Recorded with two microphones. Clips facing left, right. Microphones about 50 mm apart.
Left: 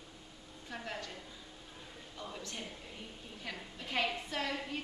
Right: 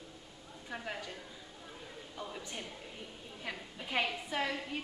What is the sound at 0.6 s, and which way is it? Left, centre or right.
A woman's voice, centre.